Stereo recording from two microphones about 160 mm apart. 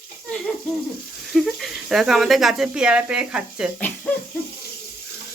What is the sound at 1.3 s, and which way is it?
Speech, centre (ahead or behind).